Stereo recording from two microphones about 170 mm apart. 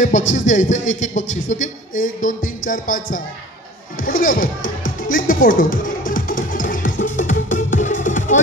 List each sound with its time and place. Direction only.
0.3 s a man's voice: 45° left (ahead or behind)
5.0 s music: 55° left (ahead or behind)